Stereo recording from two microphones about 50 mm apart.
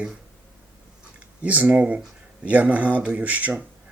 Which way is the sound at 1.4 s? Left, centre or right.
Right.